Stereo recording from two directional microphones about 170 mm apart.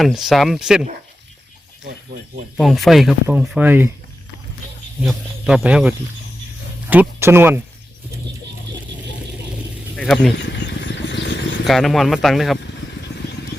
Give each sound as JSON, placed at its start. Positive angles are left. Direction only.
{"t": 0.0, "sound": "speech", "side_deg": 0}
{"t": 2.6, "sound": "speech", "side_deg": 0}
{"t": 5.0, "sound": "speech", "side_deg": 0}
{"t": 9.9, "sound": "vehicle", "side_deg": 0}
{"t": 10.3, "sound": "vehicle", "side_deg": 90}
{"t": 11.6, "sound": "speech", "side_deg": 0}